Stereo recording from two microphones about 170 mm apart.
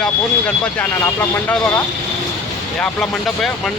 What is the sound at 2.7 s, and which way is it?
Speech, centre (ahead or behind).